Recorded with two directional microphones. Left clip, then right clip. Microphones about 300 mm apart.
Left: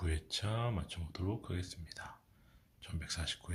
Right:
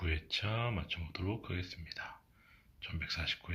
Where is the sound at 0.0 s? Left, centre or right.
Centre.